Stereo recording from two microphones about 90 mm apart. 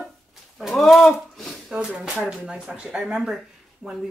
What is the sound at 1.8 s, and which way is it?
Speech, 10° right (ahead or behind).